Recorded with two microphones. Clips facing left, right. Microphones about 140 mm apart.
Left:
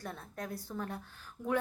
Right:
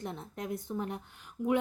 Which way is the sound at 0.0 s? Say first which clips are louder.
Right 3 dB; 20° right (ahead or behind).